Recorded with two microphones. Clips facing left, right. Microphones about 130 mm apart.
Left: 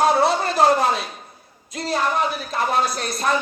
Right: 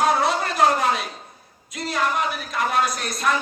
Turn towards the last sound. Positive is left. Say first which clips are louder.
# left 1 dB
turn(degrees=30)  # may be behind; listen again after turning